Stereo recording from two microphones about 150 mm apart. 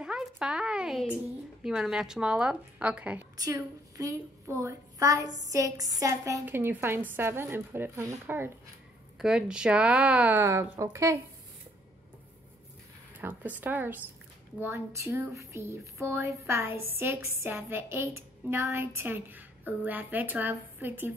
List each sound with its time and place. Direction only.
0.0 s a woman's voice: 5° right (ahead or behind)
3.3 s a woman's voice: 25° right (ahead or behind)
9.2 s speech: 5° right (ahead or behind)
13.2 s speech: 10° right (ahead or behind)